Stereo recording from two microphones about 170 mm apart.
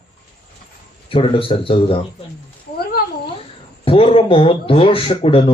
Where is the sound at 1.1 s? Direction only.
30° left (ahead or behind).